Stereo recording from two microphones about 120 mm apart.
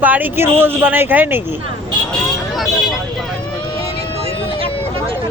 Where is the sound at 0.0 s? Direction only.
15° right (ahead or behind).